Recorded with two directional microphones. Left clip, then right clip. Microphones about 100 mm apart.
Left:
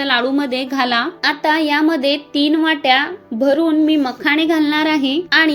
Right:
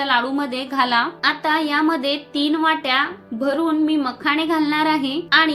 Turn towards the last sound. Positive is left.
turn(degrees=40)  # may be behind; listen again after turning